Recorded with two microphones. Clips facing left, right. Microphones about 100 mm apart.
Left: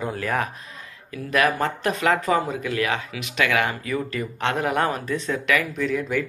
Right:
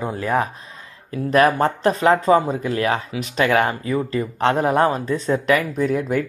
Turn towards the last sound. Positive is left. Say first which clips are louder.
# right 4 dB
turn(degrees=-45)  # may be behind; listen again after turning